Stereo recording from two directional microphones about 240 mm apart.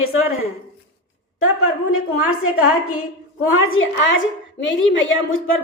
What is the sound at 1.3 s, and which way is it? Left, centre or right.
A woman's voice, left.